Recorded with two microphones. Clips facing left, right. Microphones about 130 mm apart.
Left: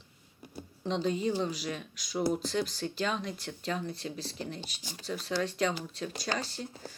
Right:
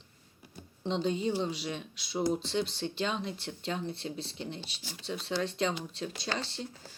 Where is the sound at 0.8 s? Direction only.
30° right (ahead or behind).